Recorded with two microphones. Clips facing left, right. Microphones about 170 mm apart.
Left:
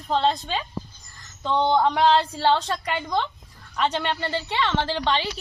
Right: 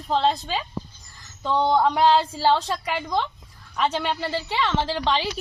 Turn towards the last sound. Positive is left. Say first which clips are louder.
# right 1 dB
turn(degrees=-5)  # may be behind; listen again after turning